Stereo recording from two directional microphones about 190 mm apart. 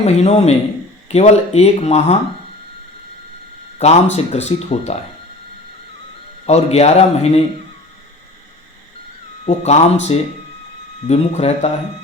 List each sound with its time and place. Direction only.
0.0 s speech: 35° left (ahead or behind)
3.8 s speech: 35° left (ahead or behind)
6.4 s speech: 35° left (ahead or behind)
9.5 s speech: 35° left (ahead or behind)